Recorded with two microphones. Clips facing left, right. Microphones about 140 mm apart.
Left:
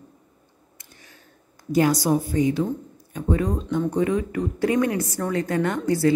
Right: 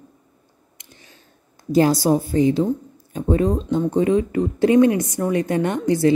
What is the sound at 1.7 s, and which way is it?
Speech, 30° right (ahead or behind).